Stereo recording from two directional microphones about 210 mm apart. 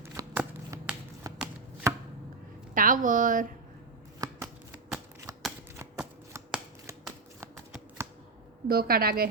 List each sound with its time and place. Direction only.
0.0 s shuffling cards: 15° right (ahead or behind)
2.7 s a woman's voice: 40° right (ahead or behind)
4.2 s shuffling cards: 20° right (ahead or behind)
5.3 s scissors: 15° right (ahead or behind)
5.7 s shuffling cards: 15° right (ahead or behind)
8.6 s a woman's voice: 45° right (ahead or behind)